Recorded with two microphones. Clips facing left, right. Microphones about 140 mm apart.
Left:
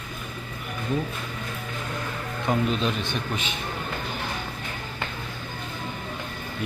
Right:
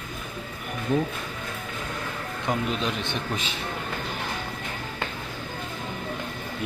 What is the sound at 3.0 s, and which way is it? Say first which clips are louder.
Speech: even; 30° right (ahead or behind).